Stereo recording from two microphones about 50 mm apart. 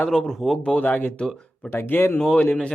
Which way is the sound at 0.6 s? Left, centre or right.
Left.